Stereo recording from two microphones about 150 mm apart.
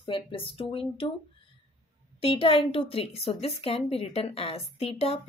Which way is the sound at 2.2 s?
40° left (ahead or behind).